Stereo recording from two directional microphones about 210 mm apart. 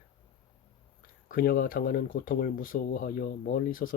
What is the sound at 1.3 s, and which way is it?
Speech, 45° left (ahead or behind).